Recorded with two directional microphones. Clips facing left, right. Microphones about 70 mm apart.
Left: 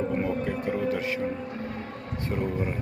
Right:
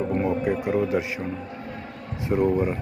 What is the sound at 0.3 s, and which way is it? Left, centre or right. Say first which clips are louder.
Speech: right 4 dB; centre.